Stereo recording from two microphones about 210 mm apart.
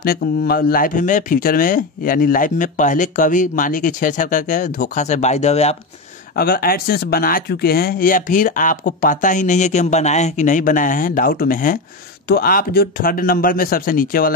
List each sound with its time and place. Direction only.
0.0 s speech: 45° left (ahead or behind)
6.3 s speech: 45° left (ahead or behind)